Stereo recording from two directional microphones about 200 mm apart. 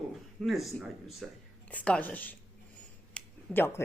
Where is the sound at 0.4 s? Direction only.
Centre (ahead or behind).